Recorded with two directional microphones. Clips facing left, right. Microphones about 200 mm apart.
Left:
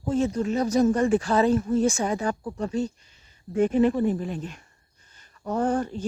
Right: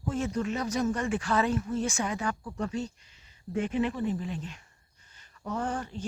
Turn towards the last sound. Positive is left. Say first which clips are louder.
# left 8 dB
turn(degrees=45)  # may be behind; listen again after turning